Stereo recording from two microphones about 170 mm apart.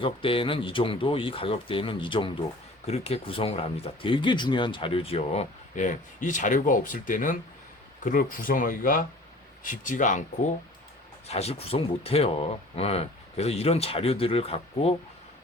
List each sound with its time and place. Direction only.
0.0 s speech: 30° left (ahead or behind); by 10.2 s 50° left (ahead or behind)
11.3 s speech: 35° left (ahead or behind)